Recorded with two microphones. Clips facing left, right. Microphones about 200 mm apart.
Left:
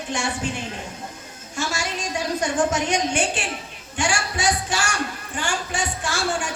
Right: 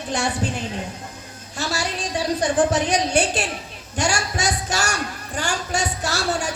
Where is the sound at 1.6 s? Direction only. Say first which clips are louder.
Right 1 dB; 35° right (ahead or behind).